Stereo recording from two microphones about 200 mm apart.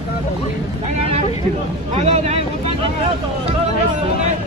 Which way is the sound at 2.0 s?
30° right (ahead or behind).